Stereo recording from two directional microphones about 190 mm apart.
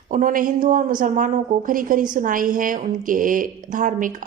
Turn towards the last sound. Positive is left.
turn(degrees=-45)  # may be behind; listen again after turning